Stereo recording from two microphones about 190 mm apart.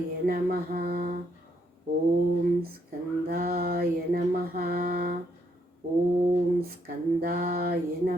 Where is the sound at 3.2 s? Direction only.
50° right (ahead or behind).